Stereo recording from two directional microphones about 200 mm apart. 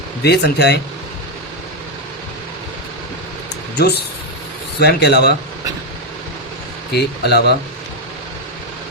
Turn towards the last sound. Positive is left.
turn(degrees=55)  # may be behind; listen again after turning